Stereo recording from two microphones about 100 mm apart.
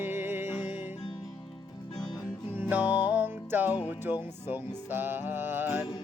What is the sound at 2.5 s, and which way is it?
Music, 20° right (ahead or behind).